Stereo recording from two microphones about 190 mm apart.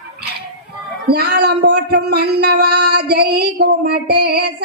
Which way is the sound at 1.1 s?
60° right (ahead or behind).